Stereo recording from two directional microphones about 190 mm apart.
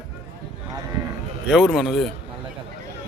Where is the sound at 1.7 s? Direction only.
Centre (ahead or behind).